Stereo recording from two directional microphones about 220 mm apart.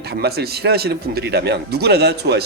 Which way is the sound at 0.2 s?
45° right (ahead or behind).